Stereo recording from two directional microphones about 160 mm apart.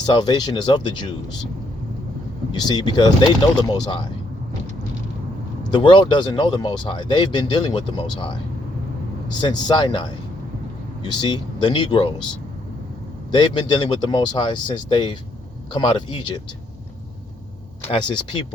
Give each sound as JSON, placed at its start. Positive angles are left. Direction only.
{"t": 0.0, "sound": "speech", "side_deg": 25}
{"t": 2.5, "sound": "speech", "side_deg": 25}
{"t": 5.7, "sound": "speech", "side_deg": 30}
{"t": 9.4, "sound": "speech", "side_deg": 25}
{"t": 13.3, "sound": "speech", "side_deg": 30}
{"t": 17.9, "sound": "speech", "side_deg": 30}